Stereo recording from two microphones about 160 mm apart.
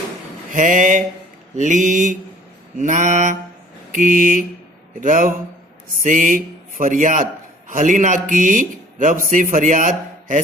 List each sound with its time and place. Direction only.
0.5 s mantra: 55° right (ahead or behind)
3.9 s speech: 55° right (ahead or behind)